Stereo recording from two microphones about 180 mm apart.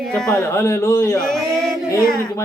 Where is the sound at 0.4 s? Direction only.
15° left (ahead or behind).